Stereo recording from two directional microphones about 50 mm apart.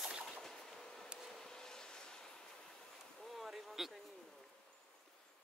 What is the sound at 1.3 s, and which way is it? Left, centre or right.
Train, centre.